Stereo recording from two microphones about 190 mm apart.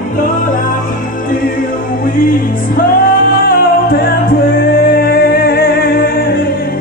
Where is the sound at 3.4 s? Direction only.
50° left (ahead or behind).